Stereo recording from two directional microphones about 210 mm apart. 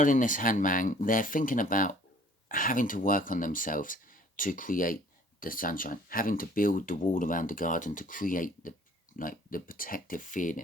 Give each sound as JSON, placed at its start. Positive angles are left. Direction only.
{"t": 0.0, "sound": "speech", "side_deg": 40}